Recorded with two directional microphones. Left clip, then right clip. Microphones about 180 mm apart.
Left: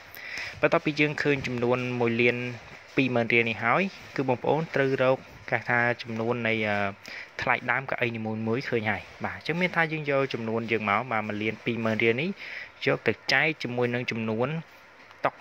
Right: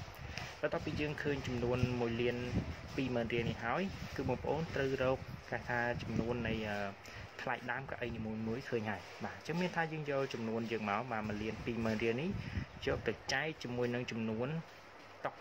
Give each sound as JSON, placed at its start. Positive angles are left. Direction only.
{"t": 0.6, "sound": "speech", "side_deg": 25}
{"t": 1.8, "sound": "speech", "side_deg": 10}
{"t": 2.0, "sound": "speech", "side_deg": 20}